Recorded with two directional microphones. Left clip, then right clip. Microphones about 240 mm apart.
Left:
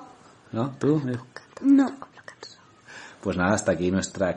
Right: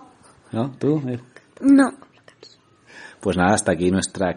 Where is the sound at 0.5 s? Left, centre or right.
Right.